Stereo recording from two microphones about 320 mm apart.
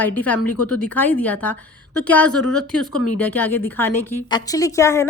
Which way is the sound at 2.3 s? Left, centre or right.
Left.